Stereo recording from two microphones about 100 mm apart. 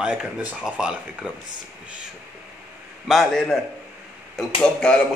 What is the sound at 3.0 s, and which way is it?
Speech, centre (ahead or behind).